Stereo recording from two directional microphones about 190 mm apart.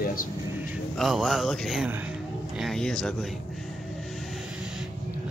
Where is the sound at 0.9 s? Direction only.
Centre (ahead or behind).